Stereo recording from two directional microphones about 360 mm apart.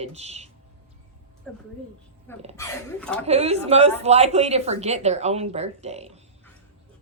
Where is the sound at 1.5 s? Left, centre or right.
Centre.